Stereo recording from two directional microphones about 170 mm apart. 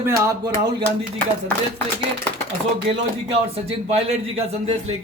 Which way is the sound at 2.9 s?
35° right (ahead or behind).